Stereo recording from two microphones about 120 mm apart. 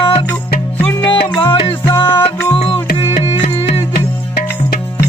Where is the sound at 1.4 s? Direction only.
50° left (ahead or behind).